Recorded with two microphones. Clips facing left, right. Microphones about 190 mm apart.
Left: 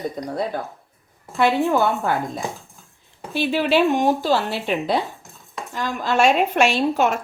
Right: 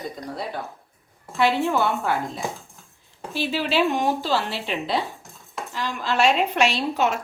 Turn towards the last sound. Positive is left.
turn(degrees=50)  # may be behind; listen again after turning